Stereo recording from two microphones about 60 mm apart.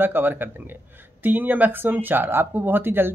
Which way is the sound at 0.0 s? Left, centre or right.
Right.